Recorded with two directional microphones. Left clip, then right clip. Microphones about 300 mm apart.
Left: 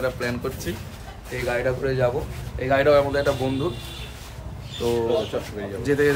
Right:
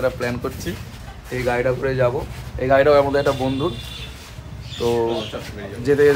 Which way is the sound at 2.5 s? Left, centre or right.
Centre.